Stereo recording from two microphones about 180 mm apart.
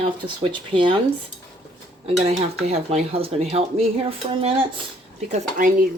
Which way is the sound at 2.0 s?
35° right (ahead or behind).